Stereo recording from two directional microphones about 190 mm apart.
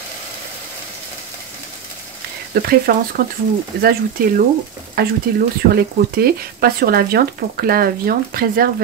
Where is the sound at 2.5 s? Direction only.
50° right (ahead or behind).